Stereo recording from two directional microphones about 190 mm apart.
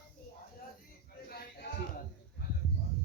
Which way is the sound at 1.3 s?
55° left (ahead or behind).